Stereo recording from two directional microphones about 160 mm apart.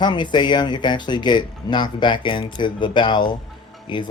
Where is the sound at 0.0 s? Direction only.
30° left (ahead or behind).